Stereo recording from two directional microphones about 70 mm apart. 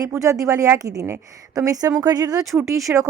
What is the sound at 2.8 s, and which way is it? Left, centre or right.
Speech, right.